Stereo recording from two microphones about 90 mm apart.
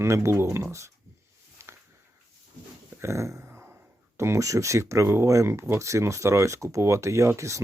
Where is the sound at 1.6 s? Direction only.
30° right (ahead or behind).